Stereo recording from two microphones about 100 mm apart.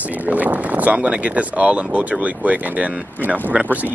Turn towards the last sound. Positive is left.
turn(degrees=-15)  # may be behind; listen again after turning